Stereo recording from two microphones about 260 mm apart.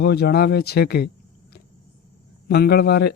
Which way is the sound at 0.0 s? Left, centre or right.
Left.